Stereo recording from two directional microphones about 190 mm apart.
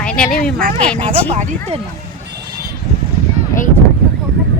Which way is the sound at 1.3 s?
30° right (ahead or behind).